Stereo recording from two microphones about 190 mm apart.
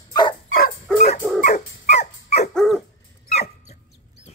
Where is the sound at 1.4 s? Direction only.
40° left (ahead or behind).